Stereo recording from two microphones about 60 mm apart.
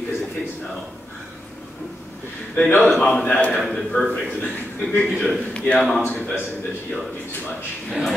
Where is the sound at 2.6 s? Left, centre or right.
Left.